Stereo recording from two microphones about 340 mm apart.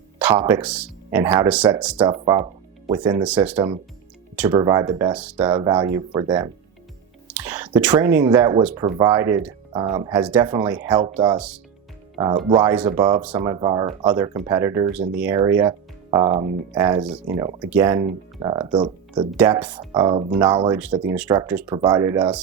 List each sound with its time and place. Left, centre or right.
0.4 s speech: centre
10.2 s speech: centre
12.5 s speech: centre